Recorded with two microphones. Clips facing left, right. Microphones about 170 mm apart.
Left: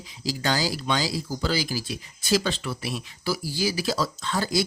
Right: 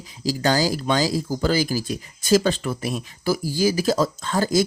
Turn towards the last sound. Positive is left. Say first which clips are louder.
# right 5 dB
turn(degrees=-45)  # may be behind; listen again after turning